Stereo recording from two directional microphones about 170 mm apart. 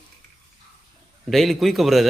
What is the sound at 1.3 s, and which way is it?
Speech, centre (ahead or behind).